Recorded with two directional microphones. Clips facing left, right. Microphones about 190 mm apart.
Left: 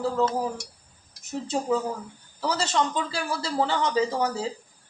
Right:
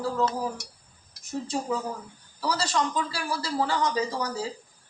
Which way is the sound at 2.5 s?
25° left (ahead or behind).